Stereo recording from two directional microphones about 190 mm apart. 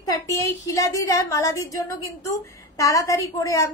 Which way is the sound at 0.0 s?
15° left (ahead or behind).